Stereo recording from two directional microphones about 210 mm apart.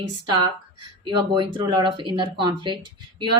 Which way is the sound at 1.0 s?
20° right (ahead or behind).